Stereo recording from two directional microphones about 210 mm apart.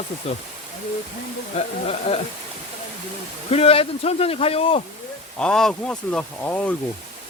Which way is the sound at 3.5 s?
30° left (ahead or behind).